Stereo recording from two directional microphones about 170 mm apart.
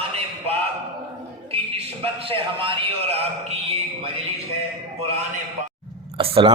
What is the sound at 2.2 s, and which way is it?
A man's voice, 30° right (ahead or behind).